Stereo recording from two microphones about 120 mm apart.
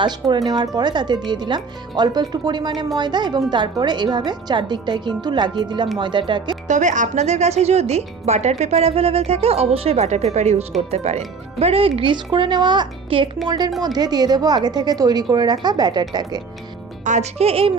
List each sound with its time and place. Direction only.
0.0 s a woman's voice: 35° right (ahead or behind)
6.7 s a woman's voice: 90° right; by 13.3 s 45° right (ahead or behind)
13.8 s a woman's voice: 35° right (ahead or behind)
17.0 s a woman's voice: 80° right; by 17.7 s 55° right (ahead or behind)